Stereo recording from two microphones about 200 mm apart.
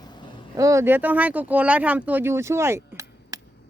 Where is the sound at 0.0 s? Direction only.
20° left (ahead or behind).